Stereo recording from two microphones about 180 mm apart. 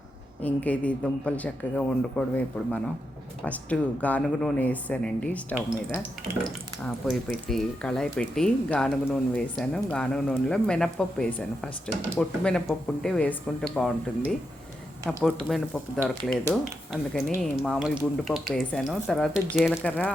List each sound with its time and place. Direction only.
0.4 s speech: 10° left (ahead or behind)